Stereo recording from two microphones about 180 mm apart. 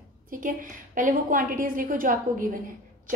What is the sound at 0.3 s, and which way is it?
A woman's voice, 50° right (ahead or behind).